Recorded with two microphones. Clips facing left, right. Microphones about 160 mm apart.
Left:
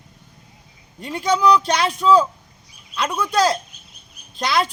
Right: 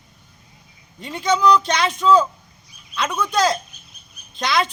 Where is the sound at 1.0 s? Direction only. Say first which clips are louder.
Even; 10° left (ahead or behind).